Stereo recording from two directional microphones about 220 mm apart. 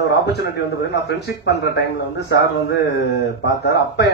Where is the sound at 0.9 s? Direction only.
50° left (ahead or behind).